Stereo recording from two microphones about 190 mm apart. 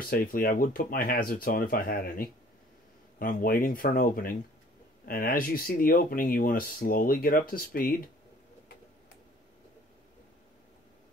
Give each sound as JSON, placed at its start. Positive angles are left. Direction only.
{"t": 0.1, "sound": "speech", "side_deg": 50}